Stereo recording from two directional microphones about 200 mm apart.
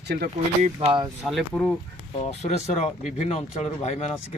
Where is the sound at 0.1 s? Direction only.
45° right (ahead or behind).